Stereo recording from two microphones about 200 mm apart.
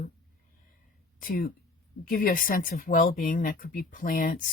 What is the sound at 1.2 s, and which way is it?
Speech, 45° left (ahead or behind).